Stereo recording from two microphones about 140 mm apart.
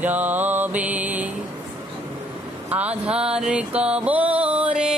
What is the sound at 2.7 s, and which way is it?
Music, 10° right (ahead or behind).